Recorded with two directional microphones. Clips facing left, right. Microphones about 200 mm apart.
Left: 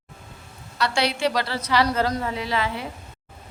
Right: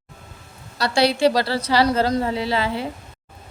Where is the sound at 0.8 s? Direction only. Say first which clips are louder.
Right 5 dB; 35° right (ahead or behind).